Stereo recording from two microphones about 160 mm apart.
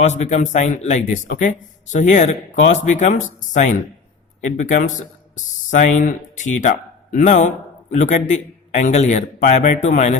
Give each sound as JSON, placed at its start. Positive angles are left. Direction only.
{"t": 0.0, "sound": "a man's voice", "side_deg": 45}